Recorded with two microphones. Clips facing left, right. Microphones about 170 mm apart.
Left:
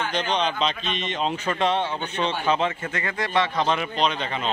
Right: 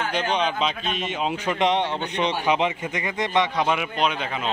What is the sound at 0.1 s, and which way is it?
Speech, 10° right (ahead or behind).